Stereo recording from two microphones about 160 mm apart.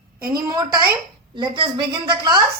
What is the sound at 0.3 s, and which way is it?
A woman's voice, 25° right (ahead or behind).